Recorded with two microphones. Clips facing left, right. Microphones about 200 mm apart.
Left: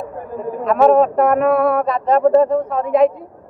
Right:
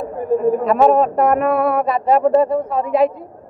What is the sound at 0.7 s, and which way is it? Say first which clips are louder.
Speech: left 5 dB; centre (ahead or behind).